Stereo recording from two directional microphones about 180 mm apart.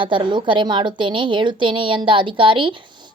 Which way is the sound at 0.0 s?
25° right (ahead or behind).